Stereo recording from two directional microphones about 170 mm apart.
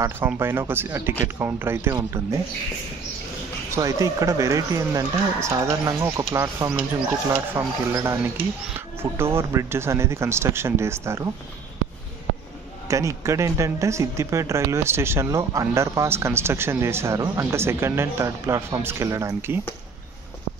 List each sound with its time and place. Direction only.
0.0 s speech: 15° right (ahead or behind)
3.7 s speech: 20° right (ahead or behind)
12.8 s speech: 20° right (ahead or behind)